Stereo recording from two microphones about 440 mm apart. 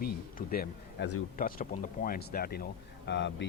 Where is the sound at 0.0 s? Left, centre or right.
Centre.